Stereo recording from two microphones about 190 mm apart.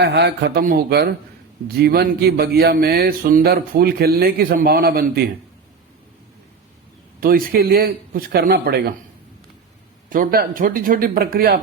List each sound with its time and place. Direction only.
0.0 s speech: 60° right (ahead or behind)
7.2 s speech: 50° right (ahead or behind)
10.1 s speech: 45° right (ahead or behind)